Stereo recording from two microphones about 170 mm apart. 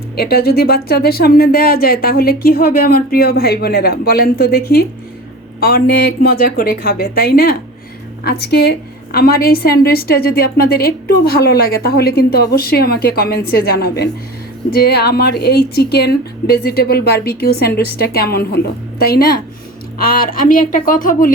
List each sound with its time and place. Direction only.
0.2 s speech: 65° left (ahead or behind)
8.2 s speech: 75° left (ahead or behind); by 21.3 s 55° left (ahead or behind)